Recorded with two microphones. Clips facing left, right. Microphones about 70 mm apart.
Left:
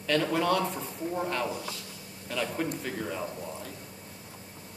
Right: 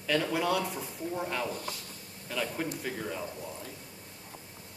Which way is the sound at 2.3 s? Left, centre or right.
Centre.